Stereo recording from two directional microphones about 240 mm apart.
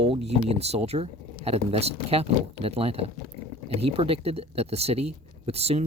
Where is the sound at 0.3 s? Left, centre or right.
Right.